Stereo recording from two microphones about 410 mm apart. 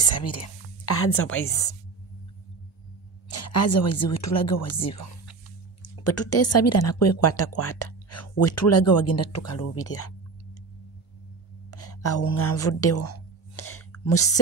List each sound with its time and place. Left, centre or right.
0.0 s speech: left
3.3 s a woman's voice: left
6.3 s a woman's voice: left
11.7 s a sound: left